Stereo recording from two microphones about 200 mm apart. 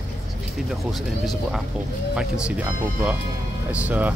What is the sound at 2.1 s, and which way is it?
Speech, 5° right (ahead or behind).